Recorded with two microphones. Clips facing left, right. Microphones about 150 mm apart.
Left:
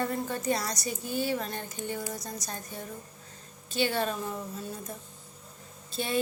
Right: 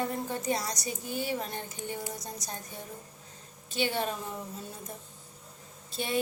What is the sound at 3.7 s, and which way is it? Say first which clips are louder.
Speech: left 2 dB; 20° right (ahead or behind).